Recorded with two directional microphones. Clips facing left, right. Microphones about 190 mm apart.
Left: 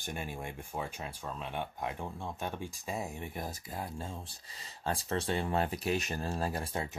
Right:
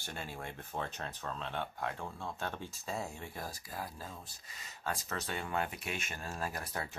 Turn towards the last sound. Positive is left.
turn(degrees=30)  # may be behind; listen again after turning